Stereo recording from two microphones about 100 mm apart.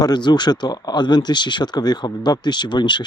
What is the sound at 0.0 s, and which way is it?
Speech, 45° left (ahead or behind).